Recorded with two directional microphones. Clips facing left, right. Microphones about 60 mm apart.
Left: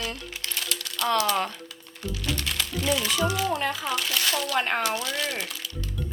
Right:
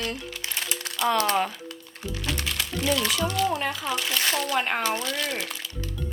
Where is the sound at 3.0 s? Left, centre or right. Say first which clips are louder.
Right 1 dB; centre.